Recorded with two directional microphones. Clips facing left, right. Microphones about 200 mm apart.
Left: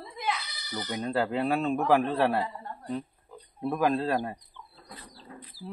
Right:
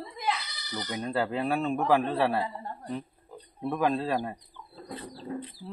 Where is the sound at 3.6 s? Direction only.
5° left (ahead or behind).